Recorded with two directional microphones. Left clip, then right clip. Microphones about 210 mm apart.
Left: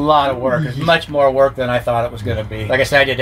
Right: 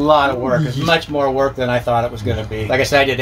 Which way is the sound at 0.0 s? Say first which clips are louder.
Even; 15° left (ahead or behind).